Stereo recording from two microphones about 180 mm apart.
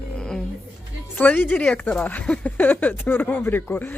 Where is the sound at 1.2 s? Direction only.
10° left (ahead or behind).